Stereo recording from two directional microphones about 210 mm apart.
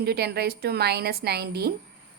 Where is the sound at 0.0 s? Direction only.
50° right (ahead or behind).